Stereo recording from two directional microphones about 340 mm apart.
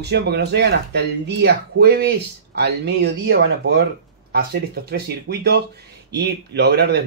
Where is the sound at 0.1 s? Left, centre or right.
Right.